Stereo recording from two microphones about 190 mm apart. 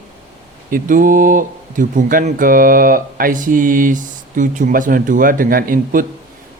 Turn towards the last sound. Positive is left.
turn(degrees=-45)  # may be behind; listen again after turning